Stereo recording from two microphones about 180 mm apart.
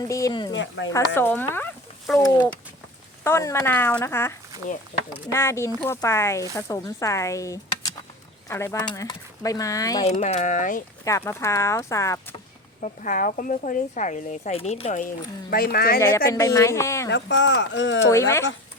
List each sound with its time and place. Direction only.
0.1 s speech: 20° left (ahead or behind)
0.5 s speech: 90° left
0.9 s speech: 20° left (ahead or behind)
10.0 s speech: 35° left (ahead or behind)
11.0 s speech: 15° left (ahead or behind)
12.8 s speech: 45° left (ahead or behind)
15.4 s speech: 55° left (ahead or behind)
16.0 s speech: 15° left (ahead or behind)
17.1 s speech: 75° left (ahead or behind)
18.1 s speech: 15° left (ahead or behind)